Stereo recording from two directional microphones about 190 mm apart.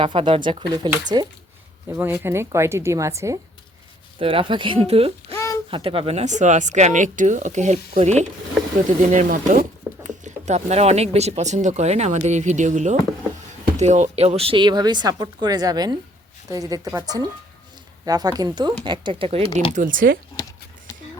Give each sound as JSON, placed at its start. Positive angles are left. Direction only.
{"t": 0.0, "sound": "speech", "side_deg": -25}
{"t": 4.2, "sound": "speech", "side_deg": -30}
{"t": 5.3, "sound": "a sound", "side_deg": 15}
{"t": 5.7, "sound": "speech", "side_deg": -30}
{"t": 19.7, "sound": "speech", "side_deg": -45}
{"t": 20.3, "sound": "a sound", "side_deg": 20}